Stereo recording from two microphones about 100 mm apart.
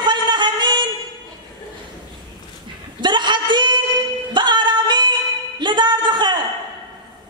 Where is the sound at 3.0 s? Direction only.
50° right (ahead or behind).